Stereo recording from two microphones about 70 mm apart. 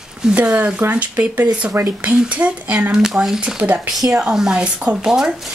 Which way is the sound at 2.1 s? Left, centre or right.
Centre.